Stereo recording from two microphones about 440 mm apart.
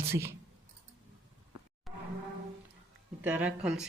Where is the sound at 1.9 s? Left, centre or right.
Centre.